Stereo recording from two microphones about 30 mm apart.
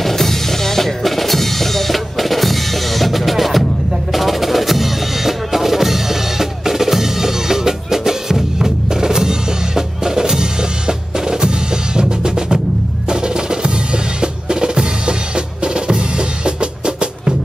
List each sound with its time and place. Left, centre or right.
0.0 s music: centre
4.1 s percussion: centre; by 12.5 s right
13.1 s drum: right